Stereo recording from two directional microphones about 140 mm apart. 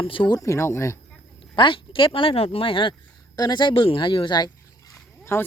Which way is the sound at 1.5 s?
35° left (ahead or behind).